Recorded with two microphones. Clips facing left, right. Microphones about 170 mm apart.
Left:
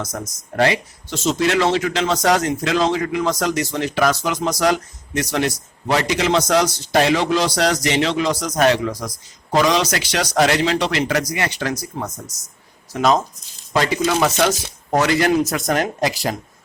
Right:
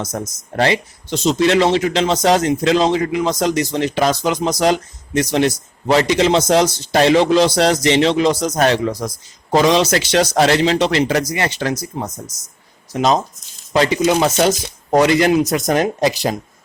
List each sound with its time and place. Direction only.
0.0 s a man's voice: 25° right (ahead or behind)